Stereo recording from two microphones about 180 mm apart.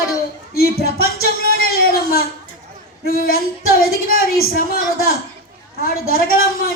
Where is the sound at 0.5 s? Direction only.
55° left (ahead or behind).